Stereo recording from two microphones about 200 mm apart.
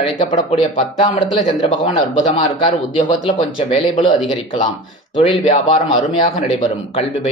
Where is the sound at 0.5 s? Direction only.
30° left (ahead or behind).